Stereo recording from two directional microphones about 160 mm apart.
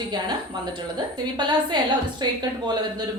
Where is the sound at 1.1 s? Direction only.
30° right (ahead or behind).